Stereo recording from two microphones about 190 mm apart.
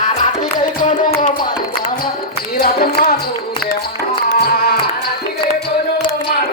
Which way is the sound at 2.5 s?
55° left (ahead or behind).